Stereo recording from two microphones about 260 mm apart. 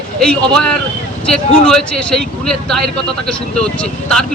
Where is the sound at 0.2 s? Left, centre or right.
Centre.